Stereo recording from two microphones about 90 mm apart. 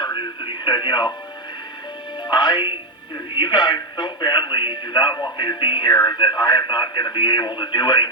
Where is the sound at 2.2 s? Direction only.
60° left (ahead or behind).